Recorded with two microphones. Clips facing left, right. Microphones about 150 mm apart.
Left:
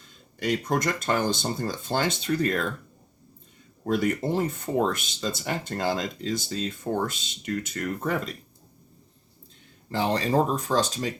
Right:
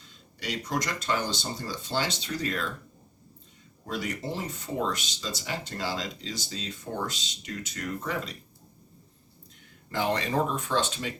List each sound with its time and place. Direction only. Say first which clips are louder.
0.0 s speech: left 8 dB; 50° left (ahead or behind)
3.8 s speech: left 8 dB; 50° left (ahead or behind)
9.9 s speech: left 4 dB; 30° left (ahead or behind)